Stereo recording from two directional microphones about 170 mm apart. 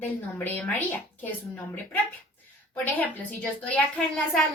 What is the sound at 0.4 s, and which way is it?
Speech, 10° left (ahead or behind).